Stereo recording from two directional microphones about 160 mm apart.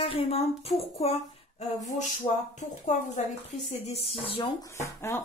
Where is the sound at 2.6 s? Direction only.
50° left (ahead or behind); by 4.7 s 30° left (ahead or behind).